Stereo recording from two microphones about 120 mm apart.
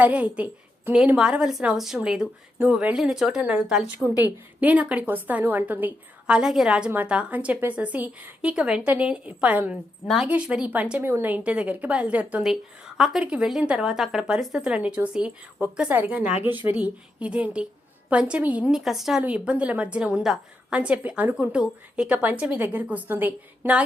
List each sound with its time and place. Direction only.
0.0 s a woman's voice: 10° right (ahead or behind)
4.0 s a woman's voice: 30° left (ahead or behind)
4.6 s speech: 10° right (ahead or behind)